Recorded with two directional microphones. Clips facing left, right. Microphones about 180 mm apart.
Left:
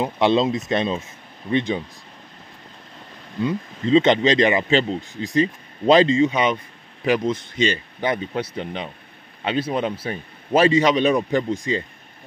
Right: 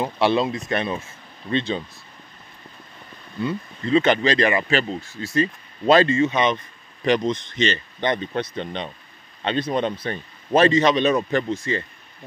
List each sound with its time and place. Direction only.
0.0 s speech: 20° left (ahead or behind)
3.3 s speech: 15° left (ahead or behind)